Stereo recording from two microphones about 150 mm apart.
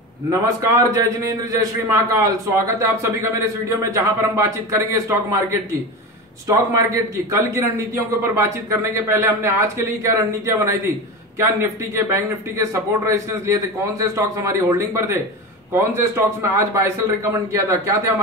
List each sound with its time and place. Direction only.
0.3 s a man's voice: 20° right (ahead or behind)